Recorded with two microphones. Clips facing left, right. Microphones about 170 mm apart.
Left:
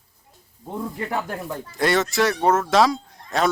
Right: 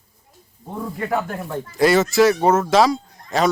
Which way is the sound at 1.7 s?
Centre (ahead or behind).